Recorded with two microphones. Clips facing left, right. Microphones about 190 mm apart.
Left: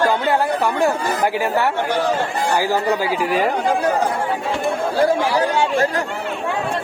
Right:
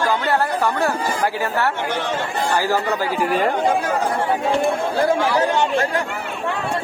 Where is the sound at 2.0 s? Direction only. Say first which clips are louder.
Left 5 dB; 35° left (ahead or behind).